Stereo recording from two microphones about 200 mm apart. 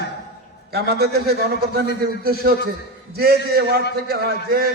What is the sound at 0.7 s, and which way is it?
A man's voice, 55° right (ahead or behind).